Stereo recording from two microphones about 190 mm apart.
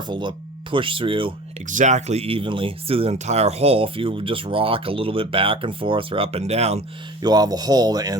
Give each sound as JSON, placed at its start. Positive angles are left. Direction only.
{"t": 0.1, "sound": "speech", "side_deg": -25}
{"t": 1.6, "sound": "speech", "side_deg": -40}
{"t": 7.2, "sound": "speech", "side_deg": -20}